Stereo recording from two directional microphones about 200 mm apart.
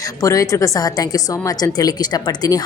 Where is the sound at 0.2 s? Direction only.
15° left (ahead or behind).